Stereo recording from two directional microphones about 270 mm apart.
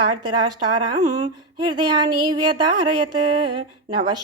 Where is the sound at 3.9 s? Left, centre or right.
Centre.